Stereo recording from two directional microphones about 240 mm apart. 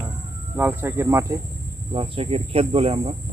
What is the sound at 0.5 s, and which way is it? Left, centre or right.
Speech, centre.